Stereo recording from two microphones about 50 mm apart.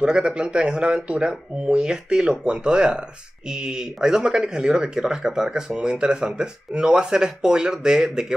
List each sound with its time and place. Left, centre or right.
0.0 s speech: centre